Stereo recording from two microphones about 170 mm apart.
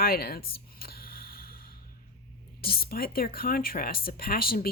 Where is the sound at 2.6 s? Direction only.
60° left (ahead or behind).